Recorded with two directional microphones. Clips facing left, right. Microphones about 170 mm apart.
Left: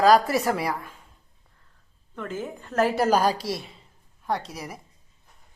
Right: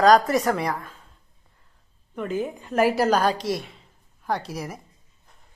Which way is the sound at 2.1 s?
15° right (ahead or behind).